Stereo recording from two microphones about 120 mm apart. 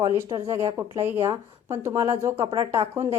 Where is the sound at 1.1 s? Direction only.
50° right (ahead or behind).